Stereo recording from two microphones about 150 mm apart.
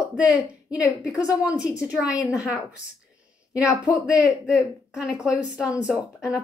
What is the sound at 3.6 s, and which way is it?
Speech, 20° left (ahead or behind).